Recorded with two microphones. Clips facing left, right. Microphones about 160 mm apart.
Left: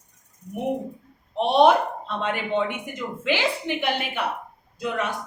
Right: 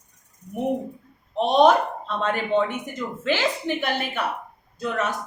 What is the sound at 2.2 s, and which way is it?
Speech, 45° right (ahead or behind).